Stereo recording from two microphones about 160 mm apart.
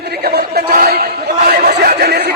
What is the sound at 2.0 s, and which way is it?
Speech, 90° right.